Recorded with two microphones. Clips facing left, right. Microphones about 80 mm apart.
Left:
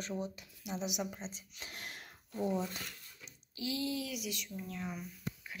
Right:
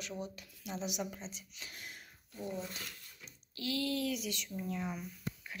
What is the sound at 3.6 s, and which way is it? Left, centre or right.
Speech, centre.